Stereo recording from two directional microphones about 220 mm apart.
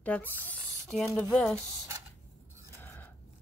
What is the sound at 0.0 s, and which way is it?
Speech, 5° left (ahead or behind).